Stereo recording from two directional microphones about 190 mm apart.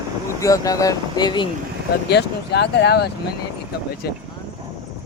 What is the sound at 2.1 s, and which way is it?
Speech, 60° left (ahead or behind).